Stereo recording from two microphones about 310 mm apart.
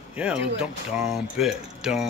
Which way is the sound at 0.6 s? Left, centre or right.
Centre.